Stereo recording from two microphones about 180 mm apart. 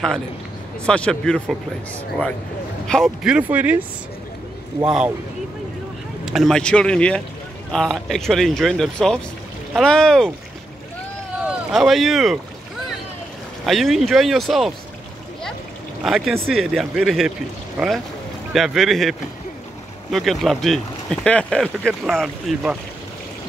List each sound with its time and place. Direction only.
0.8 s speech: 5° left (ahead or behind)
2.9 s speech: centre (ahead or behind)
4.8 s speech: 5° right (ahead or behind)
6.2 s speech: centre (ahead or behind)
11.4 s boat: centre (ahead or behind)
13.7 s speech: centre (ahead or behind)
16.0 s speech: centre (ahead or behind)